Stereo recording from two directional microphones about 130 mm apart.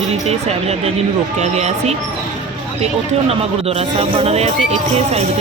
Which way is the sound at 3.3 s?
50° right (ahead or behind).